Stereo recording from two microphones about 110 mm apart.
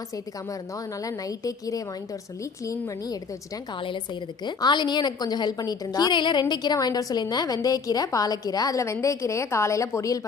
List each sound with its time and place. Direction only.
1.0 s a woman's voice: 35° left (ahead or behind)
3.8 s a woman's voice: 45° left (ahead or behind); by 10.2 s 30° left (ahead or behind)